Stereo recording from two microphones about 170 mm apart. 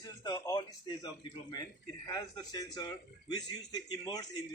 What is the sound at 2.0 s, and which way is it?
Speech, 20° left (ahead or behind).